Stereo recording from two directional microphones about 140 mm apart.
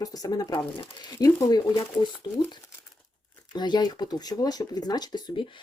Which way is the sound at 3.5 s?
30° left (ahead or behind).